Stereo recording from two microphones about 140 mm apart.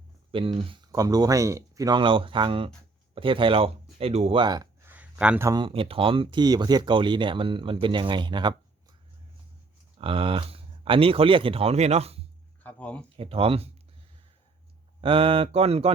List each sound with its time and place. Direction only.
0.3 s speech: 40° right (ahead or behind)
0.9 s speech: 25° right (ahead or behind); by 4.4 s 45° right (ahead or behind)
4.4 s speech: 30° right (ahead or behind)
4.9 s a sound: 10° right (ahead or behind)
5.5 s speech: 35° right (ahead or behind)
10.0 s speech: 40° right (ahead or behind)
12.6 s a sound: 10° left (ahead or behind)
13.1 s speech: 40° right (ahead or behind)
15.0 s speech: 40° right (ahead or behind)